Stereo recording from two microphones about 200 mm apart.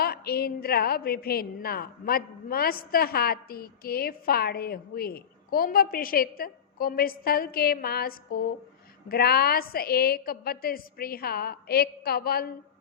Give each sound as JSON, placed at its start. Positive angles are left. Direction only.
{"t": 0.0, "sound": "a woman's voice", "side_deg": 50}